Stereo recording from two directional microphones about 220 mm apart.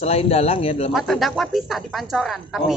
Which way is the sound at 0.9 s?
Centre (ahead or behind).